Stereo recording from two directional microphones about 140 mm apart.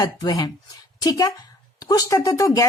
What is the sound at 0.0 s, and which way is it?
Speech, 25° left (ahead or behind).